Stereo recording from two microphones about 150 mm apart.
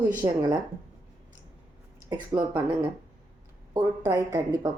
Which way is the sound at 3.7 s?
25° right (ahead or behind).